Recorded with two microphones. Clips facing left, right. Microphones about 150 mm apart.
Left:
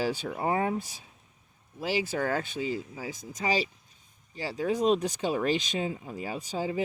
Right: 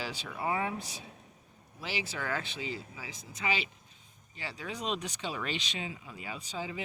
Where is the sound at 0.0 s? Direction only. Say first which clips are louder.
Left 7 dB; 50° left (ahead or behind).